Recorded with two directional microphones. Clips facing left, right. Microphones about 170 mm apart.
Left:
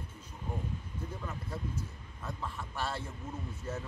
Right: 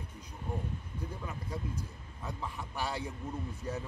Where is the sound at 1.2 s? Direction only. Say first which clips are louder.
Even; 15° right (ahead or behind).